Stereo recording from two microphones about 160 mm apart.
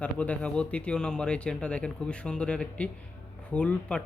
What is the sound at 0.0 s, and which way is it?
Speech, 10° left (ahead or behind).